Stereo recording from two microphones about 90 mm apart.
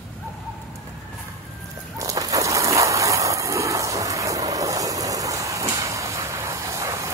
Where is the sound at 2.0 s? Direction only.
40° right (ahead or behind).